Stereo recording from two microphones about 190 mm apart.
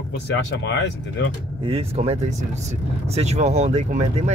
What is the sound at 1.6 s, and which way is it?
Speech, 30° right (ahead or behind).